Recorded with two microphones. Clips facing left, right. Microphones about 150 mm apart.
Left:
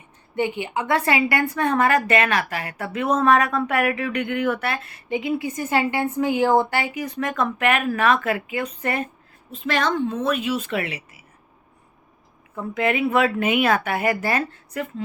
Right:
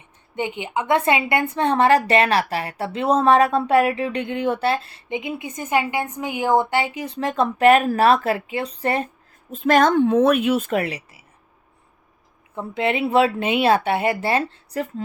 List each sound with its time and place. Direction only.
0.3 s a woman's voice: 20° right (ahead or behind)
9.5 s a woman's voice: 45° right (ahead or behind)
12.5 s a woman's voice: 30° right (ahead or behind)